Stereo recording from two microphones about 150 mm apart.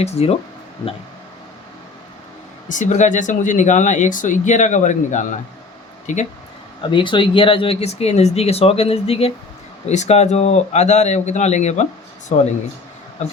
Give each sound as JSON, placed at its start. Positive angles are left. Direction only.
{"t": 0.0, "sound": "a man's voice", "side_deg": 45}
{"t": 2.6, "sound": "speech", "side_deg": 55}
{"t": 6.8, "sound": "a man's voice", "side_deg": 30}